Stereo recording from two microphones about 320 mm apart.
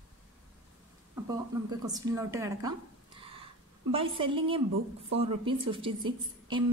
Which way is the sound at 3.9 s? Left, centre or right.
Centre.